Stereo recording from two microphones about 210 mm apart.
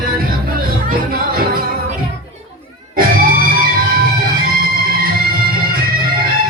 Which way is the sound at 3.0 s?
45° right (ahead or behind).